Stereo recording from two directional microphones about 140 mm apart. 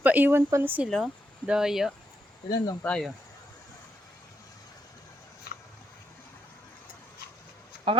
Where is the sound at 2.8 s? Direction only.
5° left (ahead or behind).